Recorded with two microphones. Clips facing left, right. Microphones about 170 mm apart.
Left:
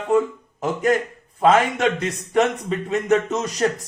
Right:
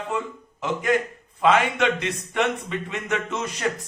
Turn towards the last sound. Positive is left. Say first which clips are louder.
# left 6 dB
turn(degrees=40)  # may be behind; listen again after turning